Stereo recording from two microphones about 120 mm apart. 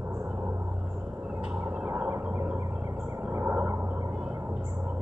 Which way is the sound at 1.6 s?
15° right (ahead or behind).